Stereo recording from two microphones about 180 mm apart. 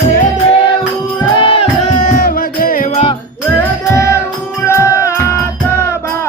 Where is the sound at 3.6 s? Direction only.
15° left (ahead or behind).